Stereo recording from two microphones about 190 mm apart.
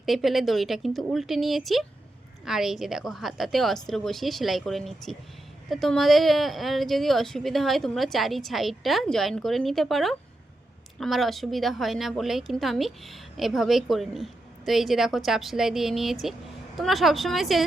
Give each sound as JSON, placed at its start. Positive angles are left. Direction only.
{"t": 0.0, "sound": "a woman's voice", "side_deg": 0}